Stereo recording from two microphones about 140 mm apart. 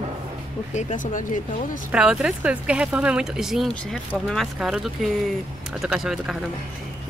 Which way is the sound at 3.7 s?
10° left (ahead or behind).